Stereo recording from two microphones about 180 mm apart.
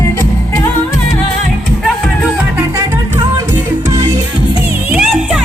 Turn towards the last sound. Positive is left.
turn(degrees=-5)  # may be behind; listen again after turning